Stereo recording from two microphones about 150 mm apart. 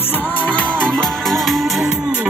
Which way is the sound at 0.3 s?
10° left (ahead or behind).